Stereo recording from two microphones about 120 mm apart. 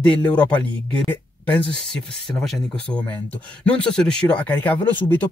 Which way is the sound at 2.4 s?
5° left (ahead or behind).